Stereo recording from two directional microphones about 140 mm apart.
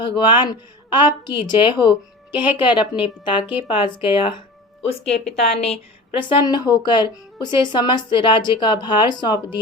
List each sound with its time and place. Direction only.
0.2 s a woman's voice: 35° left (ahead or behind)
2.3 s speech: 15° right (ahead or behind)
2.6 s a woman's voice: 35° left (ahead or behind)
3.4 s speech: 10° right (ahead or behind)
3.8 s a woman's voice: 35° left (ahead or behind)
4.9 s a woman's voice: 50° left (ahead or behind); by 9.6 s 30° left (ahead or behind)